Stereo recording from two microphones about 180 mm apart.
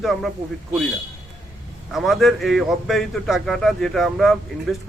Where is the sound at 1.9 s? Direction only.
Centre (ahead or behind).